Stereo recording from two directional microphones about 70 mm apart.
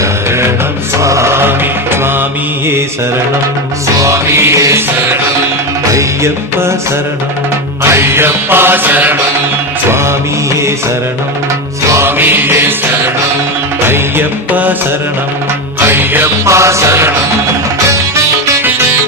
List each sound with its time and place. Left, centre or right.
0.0 s music: right
3.9 s music: right
5.9 s music: right
7.9 s music: right
11.9 s music: right
15.8 s music: right
16.5 s music: right